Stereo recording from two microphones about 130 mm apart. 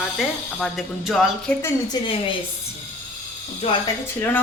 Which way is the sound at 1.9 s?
30° left (ahead or behind).